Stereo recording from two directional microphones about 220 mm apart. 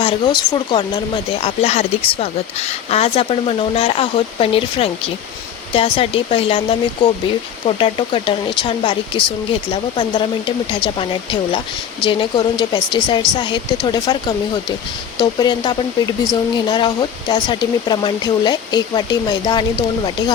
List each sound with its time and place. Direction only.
0.0 s speech: 20° left (ahead or behind)
7.8 s speech: 25° left (ahead or behind)